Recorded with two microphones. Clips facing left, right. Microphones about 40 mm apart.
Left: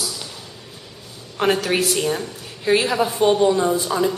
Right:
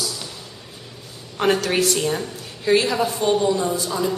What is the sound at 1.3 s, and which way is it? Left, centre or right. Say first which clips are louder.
A woman's voice: even; centre.